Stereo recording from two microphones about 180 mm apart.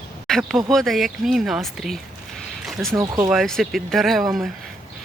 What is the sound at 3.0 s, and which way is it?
Speech, 15° right (ahead or behind).